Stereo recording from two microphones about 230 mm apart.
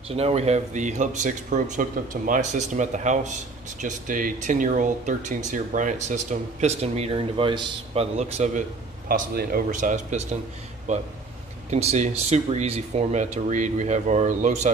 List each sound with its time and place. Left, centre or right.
0.1 s speech: right
9.1 s speech: right